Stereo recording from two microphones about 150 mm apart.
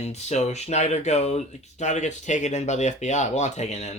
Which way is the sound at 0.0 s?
50° left (ahead or behind).